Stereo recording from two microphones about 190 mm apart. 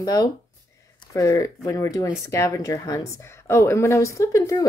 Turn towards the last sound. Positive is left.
turn(degrees=15)  # may be behind; listen again after turning